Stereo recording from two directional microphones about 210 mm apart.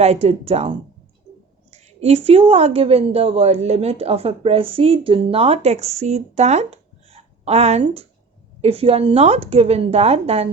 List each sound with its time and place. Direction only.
0.0 s a woman's voice: 30° right (ahead or behind)